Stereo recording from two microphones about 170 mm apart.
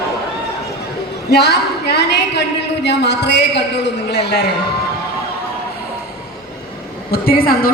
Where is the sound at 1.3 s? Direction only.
75° left (ahead or behind).